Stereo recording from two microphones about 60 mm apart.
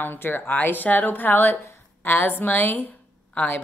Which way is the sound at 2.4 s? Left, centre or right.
Left.